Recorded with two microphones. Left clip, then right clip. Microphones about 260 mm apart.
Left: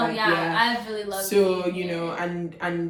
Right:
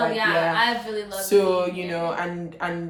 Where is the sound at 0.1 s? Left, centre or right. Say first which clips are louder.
Right 2 dB; centre.